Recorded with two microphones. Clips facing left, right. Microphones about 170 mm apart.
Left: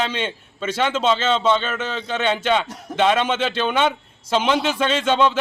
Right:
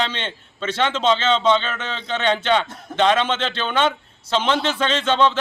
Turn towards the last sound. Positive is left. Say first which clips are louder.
# even
turn(degrees=10)  # may be behind; listen again after turning